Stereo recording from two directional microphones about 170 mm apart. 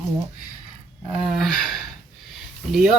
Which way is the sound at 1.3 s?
5° left (ahead or behind).